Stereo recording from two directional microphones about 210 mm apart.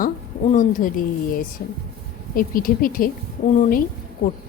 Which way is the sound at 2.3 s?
45° left (ahead or behind).